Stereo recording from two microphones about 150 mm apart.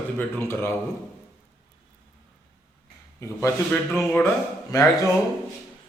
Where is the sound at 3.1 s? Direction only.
20° left (ahead or behind).